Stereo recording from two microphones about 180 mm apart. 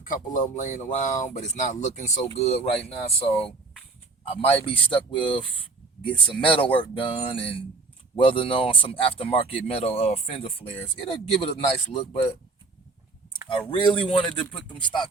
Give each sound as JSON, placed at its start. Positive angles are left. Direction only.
{"t": 0.0, "sound": "speech", "side_deg": 45}
{"t": 4.3, "sound": "speech", "side_deg": 35}
{"t": 13.7, "sound": "speech", "side_deg": 30}